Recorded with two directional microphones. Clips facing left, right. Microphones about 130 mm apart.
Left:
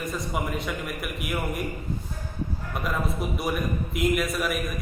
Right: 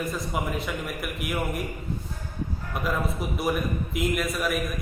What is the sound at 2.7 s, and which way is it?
A man's voice, centre (ahead or behind).